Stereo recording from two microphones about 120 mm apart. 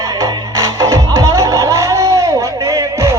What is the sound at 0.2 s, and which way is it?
Music, 30° right (ahead or behind).